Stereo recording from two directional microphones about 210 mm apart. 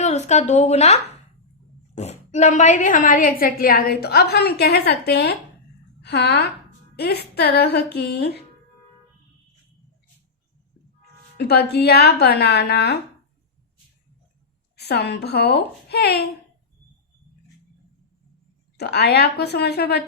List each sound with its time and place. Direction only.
0.0 s speech: 35° left (ahead or behind)
2.0 s a woman's voice: 30° left (ahead or behind); by 8.4 s 50° left (ahead or behind)
11.3 s a woman's voice: 50° left (ahead or behind)
14.8 s a woman's voice: 50° left (ahead or behind)
18.8 s a woman's voice: 50° left (ahead or behind)